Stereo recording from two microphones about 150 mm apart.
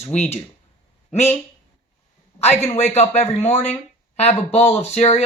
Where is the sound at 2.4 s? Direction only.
45° left (ahead or behind).